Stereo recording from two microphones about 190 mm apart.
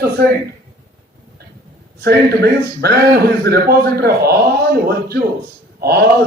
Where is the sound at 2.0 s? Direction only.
55° right (ahead or behind).